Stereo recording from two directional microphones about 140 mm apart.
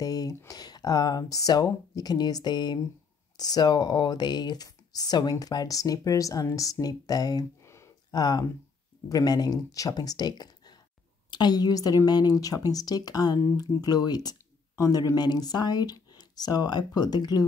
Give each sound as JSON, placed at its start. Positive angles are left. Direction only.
{"t": 0.0, "sound": "speech", "side_deg": 25}